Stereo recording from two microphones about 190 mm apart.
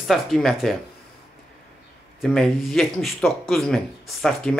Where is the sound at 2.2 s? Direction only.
Centre (ahead or behind).